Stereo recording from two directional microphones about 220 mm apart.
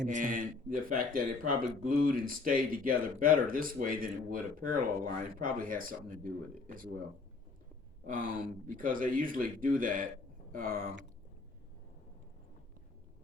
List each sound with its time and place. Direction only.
0.0 s speech: 35° right (ahead or behind)
8.0 s speech: 40° right (ahead or behind)